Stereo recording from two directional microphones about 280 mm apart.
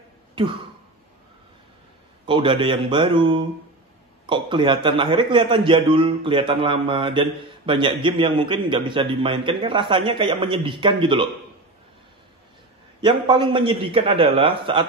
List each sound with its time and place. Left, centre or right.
2.2 s a man's voice: centre
13.0 s a man's voice: centre